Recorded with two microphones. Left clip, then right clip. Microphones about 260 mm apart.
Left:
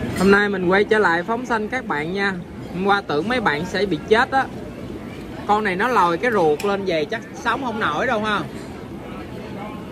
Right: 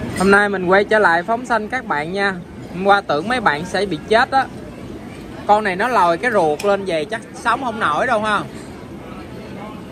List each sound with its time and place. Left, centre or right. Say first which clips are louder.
0.2 s speech: right 3 dB; centre
5.5 s speech: right 3 dB; centre